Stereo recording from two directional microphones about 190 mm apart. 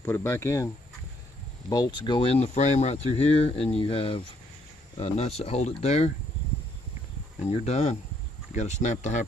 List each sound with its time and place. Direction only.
0.0 s speech: 10° left (ahead or behind)
1.7 s speech: 20° left (ahead or behind)
7.6 s speech: 35° left (ahead or behind)